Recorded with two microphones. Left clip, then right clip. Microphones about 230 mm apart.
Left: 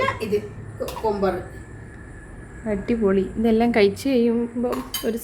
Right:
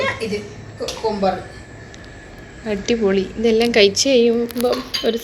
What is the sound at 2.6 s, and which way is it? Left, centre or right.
A woman's voice, centre.